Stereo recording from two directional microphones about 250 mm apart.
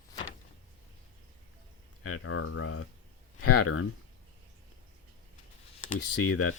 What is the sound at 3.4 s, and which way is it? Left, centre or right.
Speech, left.